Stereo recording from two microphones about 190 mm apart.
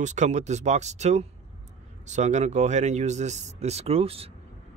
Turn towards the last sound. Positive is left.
turn(degrees=-30)  # may be behind; listen again after turning